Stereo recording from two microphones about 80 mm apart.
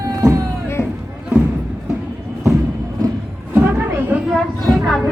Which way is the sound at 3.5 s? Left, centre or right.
Right.